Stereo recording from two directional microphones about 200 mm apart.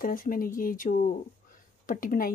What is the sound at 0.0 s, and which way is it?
Speech, 45° left (ahead or behind).